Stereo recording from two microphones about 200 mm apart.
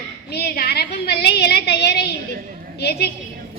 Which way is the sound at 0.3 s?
50° left (ahead or behind).